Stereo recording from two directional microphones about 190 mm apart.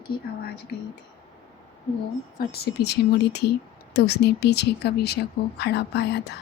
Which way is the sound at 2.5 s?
55° left (ahead or behind).